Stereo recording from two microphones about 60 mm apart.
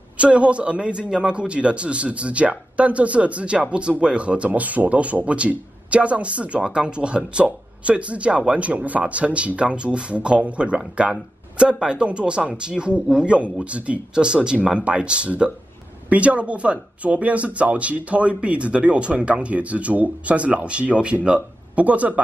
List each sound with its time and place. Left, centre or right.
0.2 s speech: right